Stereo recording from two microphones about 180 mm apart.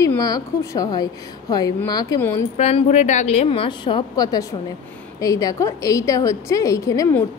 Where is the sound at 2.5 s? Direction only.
40° left (ahead or behind).